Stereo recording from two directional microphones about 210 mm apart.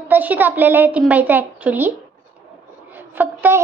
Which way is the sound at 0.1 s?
10° right (ahead or behind).